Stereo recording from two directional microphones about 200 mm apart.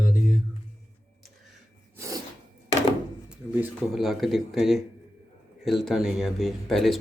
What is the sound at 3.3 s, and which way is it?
Speech, 5° right (ahead or behind).